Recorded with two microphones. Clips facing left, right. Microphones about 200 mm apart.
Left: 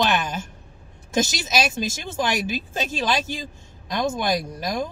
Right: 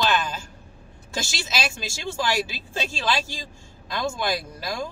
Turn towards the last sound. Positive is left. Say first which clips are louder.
# left 4 dB
turn(degrees=20)  # may be behind; listen again after turning